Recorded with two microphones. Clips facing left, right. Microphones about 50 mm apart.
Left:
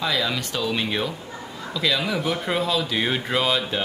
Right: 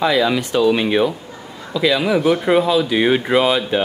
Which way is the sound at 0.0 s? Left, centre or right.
Centre.